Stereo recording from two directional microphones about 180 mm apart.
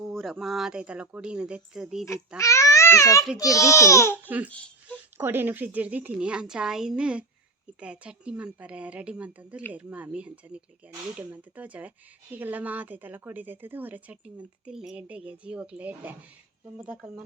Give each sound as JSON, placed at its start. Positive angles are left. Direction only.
{"t": 0.1, "sound": "speech", "side_deg": 0}
{"t": 2.4, "sound": "a child's voice", "side_deg": 15}
{"t": 5.1, "sound": "speech", "side_deg": -10}